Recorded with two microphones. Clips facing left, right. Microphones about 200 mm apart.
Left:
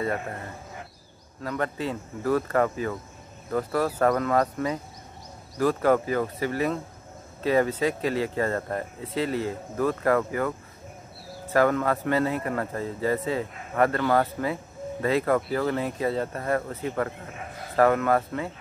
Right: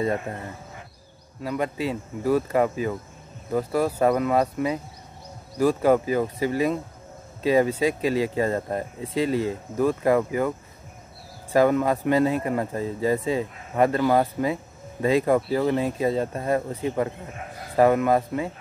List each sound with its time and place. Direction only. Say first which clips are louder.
0.0 s speech: right 3 dB; 20° right (ahead or behind)
1.4 s a man's voice: right 2 dB; 10° right (ahead or behind)